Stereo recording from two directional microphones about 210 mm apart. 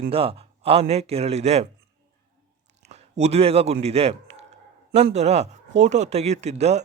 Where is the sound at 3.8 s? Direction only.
30° right (ahead or behind).